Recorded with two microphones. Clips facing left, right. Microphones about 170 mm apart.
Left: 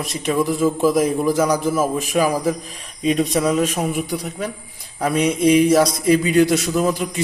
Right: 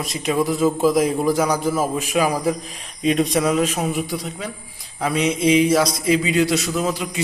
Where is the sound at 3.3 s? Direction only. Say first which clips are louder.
Left 1 dB; 40° left (ahead or behind).